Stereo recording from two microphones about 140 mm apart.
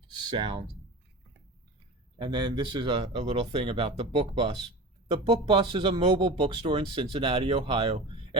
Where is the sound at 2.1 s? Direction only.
30° right (ahead or behind).